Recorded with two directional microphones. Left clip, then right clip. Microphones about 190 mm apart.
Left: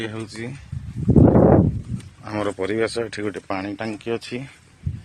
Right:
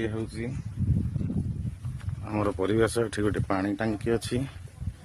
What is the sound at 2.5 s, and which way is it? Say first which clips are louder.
Speech: even; centre (ahead or behind).